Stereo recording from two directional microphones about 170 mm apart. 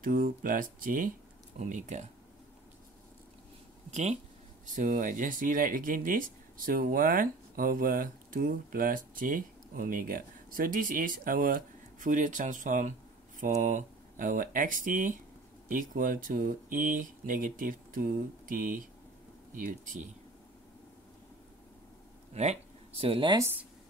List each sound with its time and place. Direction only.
0.0 s speech: 55° right (ahead or behind)
3.9 s speech: 45° right (ahead or behind)
22.3 s speech: 40° right (ahead or behind)
23.3 s speech: 15° right (ahead or behind)